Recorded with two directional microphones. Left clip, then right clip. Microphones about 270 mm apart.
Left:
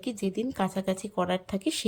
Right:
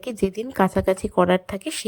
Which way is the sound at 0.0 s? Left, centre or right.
Centre.